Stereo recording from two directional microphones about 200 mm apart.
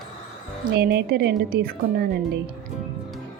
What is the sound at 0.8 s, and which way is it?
Speech, 55° right (ahead or behind).